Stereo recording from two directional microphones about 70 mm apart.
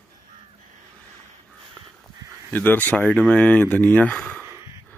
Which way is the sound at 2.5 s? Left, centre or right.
Left.